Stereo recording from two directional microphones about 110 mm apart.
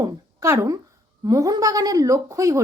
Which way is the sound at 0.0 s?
30° right (ahead or behind).